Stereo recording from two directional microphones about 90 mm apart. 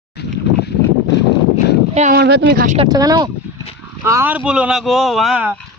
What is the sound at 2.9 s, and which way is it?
Speech, 45° right (ahead or behind).